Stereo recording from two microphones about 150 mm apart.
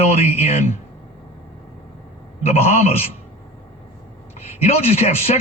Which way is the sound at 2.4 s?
45° left (ahead or behind).